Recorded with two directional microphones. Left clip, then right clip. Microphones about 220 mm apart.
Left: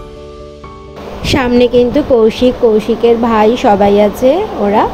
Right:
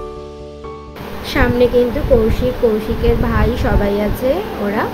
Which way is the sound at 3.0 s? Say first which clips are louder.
Left 8 dB; 25° left (ahead or behind).